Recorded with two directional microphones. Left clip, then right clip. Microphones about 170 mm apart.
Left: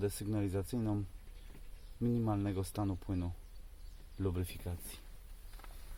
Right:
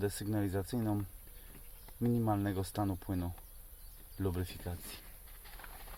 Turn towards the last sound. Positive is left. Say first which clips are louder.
# right 2 dB
turn(degrees=20)  # may be behind; listen again after turning